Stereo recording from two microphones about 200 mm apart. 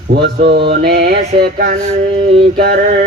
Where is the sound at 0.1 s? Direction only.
55° right (ahead or behind).